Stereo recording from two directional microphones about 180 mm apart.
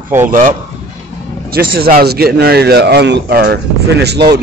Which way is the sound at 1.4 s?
60° right (ahead or behind).